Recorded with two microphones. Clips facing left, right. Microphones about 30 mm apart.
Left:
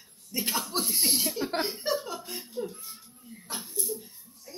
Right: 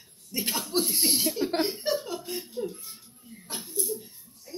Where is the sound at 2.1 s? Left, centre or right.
Right.